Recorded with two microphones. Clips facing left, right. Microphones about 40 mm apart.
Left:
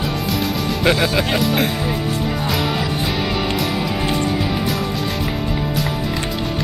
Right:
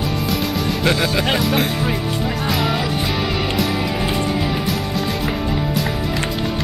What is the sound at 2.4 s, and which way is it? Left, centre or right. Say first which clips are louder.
Music: right 3 dB; centre.